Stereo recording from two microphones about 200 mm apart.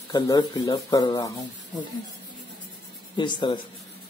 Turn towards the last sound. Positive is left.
turn(degrees=25)  # may be behind; listen again after turning